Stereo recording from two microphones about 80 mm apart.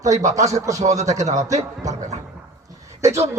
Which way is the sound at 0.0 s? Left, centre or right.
Right.